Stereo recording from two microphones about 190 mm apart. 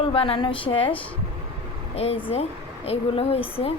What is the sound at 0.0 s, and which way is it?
Speech, 30° left (ahead or behind).